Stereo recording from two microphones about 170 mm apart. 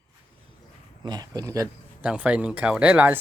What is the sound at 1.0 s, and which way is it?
Speech, 25° right (ahead or behind).